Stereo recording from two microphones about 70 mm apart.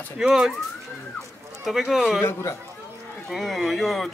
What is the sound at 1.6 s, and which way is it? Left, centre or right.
Speech, centre.